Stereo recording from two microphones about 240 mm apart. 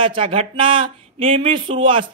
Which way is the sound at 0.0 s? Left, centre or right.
Right.